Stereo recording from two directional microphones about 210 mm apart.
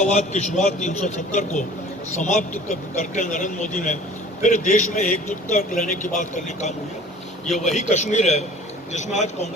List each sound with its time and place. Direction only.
0.0 s a man's voice: 35° left (ahead or behind)